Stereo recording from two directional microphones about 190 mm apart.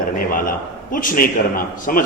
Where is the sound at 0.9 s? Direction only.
45° left (ahead or behind).